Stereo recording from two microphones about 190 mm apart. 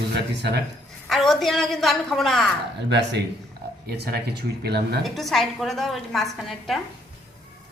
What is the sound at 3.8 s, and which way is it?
Speech, 55° right (ahead or behind).